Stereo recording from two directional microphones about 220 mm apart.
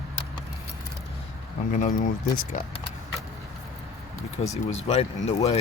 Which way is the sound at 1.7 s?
35° left (ahead or behind).